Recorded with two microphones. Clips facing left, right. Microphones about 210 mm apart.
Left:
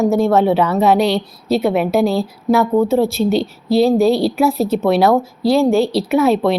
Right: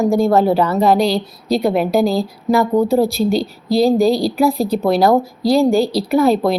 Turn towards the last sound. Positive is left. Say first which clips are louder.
# even
turn(degrees=0)  # may be behind; listen again after turning